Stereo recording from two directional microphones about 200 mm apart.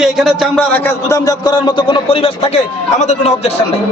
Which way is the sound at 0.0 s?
Centre (ahead or behind).